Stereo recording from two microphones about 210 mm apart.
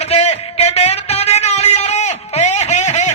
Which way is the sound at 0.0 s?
30° left (ahead or behind).